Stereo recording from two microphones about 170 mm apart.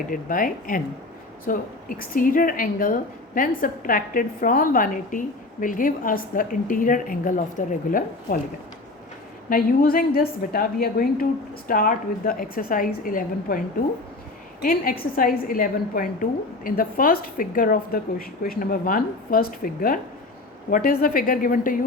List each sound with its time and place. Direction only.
0.1 s speech: 55° left (ahead or behind)
9.5 s speech: 60° left (ahead or behind)
14.6 s speech: 55° left (ahead or behind)